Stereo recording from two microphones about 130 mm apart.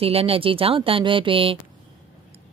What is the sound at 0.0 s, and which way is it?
A woman's voice, 50° right (ahead or behind).